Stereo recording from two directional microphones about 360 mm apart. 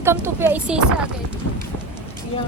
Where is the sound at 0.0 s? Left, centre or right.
Centre.